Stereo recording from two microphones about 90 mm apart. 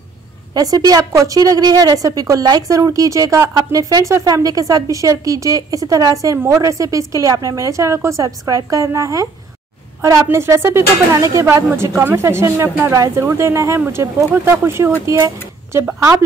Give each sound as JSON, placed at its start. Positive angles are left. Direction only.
{"t": 0.6, "sound": "a woman's voice", "side_deg": -45}
{"t": 10.3, "sound": "a woman's voice", "side_deg": -30}